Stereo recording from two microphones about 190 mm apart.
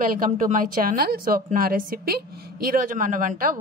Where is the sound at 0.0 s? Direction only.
45° right (ahead or behind).